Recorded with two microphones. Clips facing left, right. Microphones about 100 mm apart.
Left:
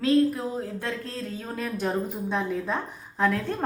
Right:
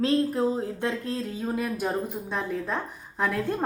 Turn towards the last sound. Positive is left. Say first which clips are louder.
# left 1 dB
turn(degrees=-5)  # may be behind; listen again after turning